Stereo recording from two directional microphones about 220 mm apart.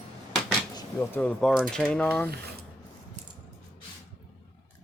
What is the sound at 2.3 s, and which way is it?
Speech, 45° right (ahead or behind).